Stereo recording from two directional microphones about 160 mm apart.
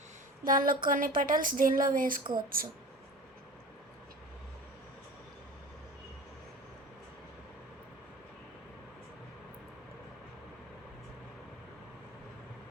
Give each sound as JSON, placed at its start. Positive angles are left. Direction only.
{"t": 0.4, "sound": "speech", "side_deg": -60}